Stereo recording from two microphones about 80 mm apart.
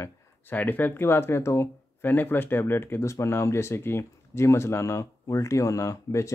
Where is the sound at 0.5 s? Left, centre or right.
Left.